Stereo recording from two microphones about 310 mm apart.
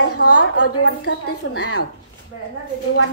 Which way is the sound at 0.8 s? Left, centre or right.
Left.